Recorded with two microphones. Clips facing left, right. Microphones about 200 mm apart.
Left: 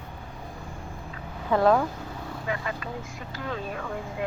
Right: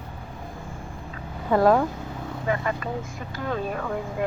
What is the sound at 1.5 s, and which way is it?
Speech, 5° right (ahead or behind).